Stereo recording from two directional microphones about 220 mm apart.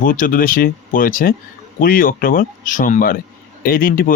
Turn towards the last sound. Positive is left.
turn(degrees=40)  # may be behind; listen again after turning